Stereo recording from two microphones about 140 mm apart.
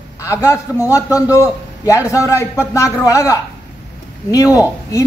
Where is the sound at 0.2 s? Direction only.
20° left (ahead or behind).